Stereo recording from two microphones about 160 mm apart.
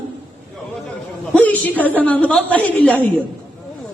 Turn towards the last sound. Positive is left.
turn(degrees=10)  # may be behind; listen again after turning